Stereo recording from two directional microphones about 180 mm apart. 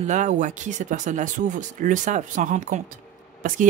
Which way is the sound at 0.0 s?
40° right (ahead or behind).